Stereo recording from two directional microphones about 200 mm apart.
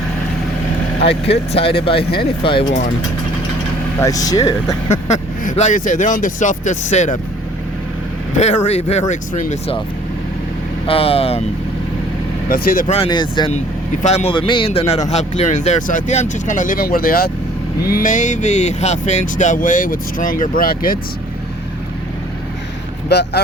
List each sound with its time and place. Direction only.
1.0 s speech: 30° left (ahead or behind)
4.0 s speech: 15° left (ahead or behind)
4.9 s speech: 35° left (ahead or behind)
8.4 s speech: 35° left (ahead or behind)
10.8 s speech: 30° left (ahead or behind)
12.5 s speech: 45° left (ahead or behind)
13.0 s speech: 20° left (ahead or behind)
14.0 s speech: 35° left (ahead or behind)
23.0 s speech: 55° left (ahead or behind)